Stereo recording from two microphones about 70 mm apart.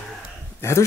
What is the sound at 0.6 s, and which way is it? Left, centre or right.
Speech, left.